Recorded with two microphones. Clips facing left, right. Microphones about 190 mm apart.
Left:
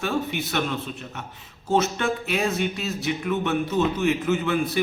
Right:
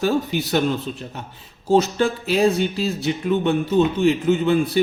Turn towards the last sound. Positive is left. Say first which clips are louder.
# right 5 dB
turn(degrees=-30)  # may be behind; listen again after turning